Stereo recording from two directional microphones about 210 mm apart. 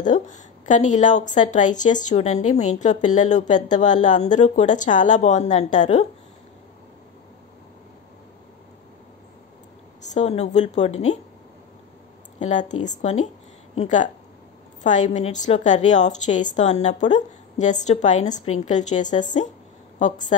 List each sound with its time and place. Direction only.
0.0 s a woman's voice: 35° left (ahead or behind)
10.1 s a woman's voice: 30° left (ahead or behind)
12.4 s a woman's voice: 35° left (ahead or behind)